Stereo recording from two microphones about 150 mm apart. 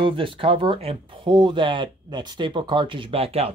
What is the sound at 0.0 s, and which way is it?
Speech, 35° right (ahead or behind).